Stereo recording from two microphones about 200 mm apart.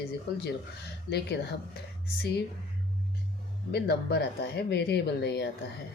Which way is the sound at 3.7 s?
55° left (ahead or behind).